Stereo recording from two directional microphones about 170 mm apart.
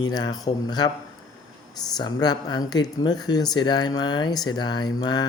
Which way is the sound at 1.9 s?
25° left (ahead or behind).